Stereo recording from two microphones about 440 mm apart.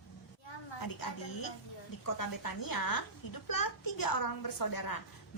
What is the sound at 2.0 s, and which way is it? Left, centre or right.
A woman's voice, left.